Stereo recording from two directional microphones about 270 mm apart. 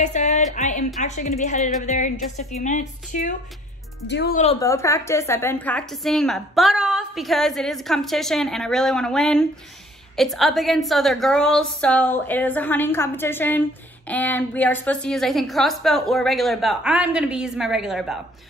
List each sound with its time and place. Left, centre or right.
0.0 s a woman's voice: left
4.1 s speech: left
4.4 s a woman's voice: centre